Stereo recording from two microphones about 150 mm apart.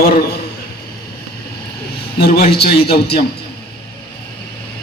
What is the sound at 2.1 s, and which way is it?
A man's voice, 90° left.